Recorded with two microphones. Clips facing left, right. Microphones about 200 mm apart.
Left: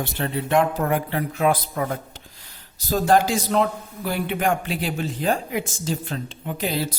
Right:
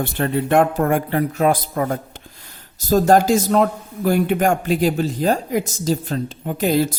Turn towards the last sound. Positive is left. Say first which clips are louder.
# right 7 dB
turn(degrees=-45)  # may be behind; listen again after turning